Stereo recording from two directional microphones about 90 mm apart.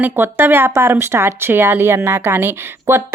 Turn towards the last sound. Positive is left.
turn(degrees=-25)  # may be behind; listen again after turning